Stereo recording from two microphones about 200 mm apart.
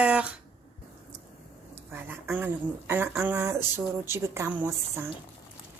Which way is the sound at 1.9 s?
10° right (ahead or behind).